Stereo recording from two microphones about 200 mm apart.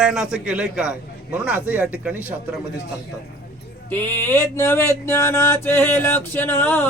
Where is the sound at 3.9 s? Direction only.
10° left (ahead or behind).